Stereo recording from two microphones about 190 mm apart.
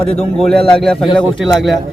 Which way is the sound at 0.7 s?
5° left (ahead or behind).